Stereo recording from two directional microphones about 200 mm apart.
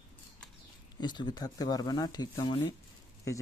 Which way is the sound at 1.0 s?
20° left (ahead or behind).